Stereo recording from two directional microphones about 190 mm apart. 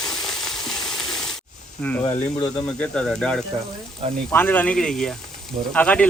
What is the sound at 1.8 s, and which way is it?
Speech, 10° left (ahead or behind).